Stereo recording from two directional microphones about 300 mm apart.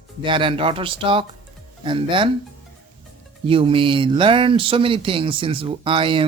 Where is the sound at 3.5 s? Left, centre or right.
Centre.